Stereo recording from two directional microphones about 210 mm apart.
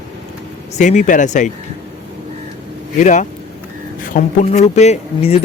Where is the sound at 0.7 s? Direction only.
35° left (ahead or behind).